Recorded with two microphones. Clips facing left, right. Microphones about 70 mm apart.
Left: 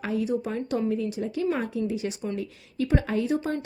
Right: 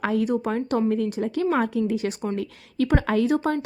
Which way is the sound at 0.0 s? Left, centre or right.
Right.